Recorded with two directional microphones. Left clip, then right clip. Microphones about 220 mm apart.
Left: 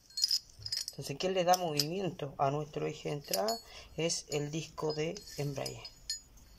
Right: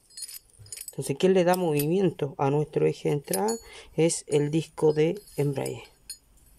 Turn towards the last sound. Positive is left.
turn(degrees=-45)  # may be behind; listen again after turning